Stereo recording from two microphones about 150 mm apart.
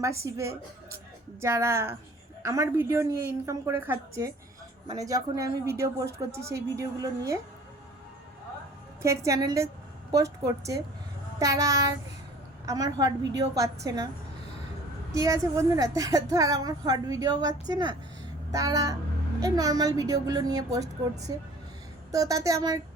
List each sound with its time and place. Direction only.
0.3 s a woman's voice: 20° right (ahead or behind)
9.0 s a woman's voice: 20° right (ahead or behind)
15.1 s a woman's voice: 20° right (ahead or behind)